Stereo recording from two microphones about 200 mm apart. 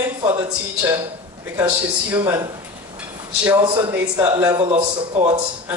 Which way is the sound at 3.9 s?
10° right (ahead or behind).